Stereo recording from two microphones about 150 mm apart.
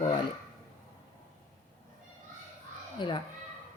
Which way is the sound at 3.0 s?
30° left (ahead or behind).